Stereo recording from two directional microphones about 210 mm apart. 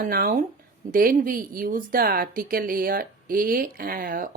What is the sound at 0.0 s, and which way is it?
A woman's voice, 45° right (ahead or behind).